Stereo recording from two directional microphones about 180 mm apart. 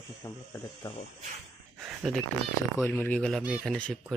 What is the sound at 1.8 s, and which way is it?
Speech, centre (ahead or behind).